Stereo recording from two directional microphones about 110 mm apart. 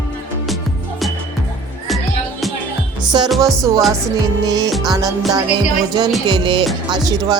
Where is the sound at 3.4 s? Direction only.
30° right (ahead or behind).